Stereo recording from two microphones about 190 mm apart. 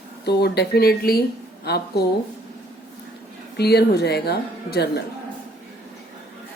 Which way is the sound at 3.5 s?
60° left (ahead or behind).